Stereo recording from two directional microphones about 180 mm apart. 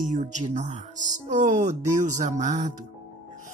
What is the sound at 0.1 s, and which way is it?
Speech, 40° right (ahead or behind).